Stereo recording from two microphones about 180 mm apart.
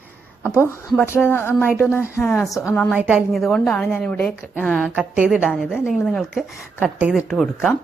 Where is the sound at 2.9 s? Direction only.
5° right (ahead or behind).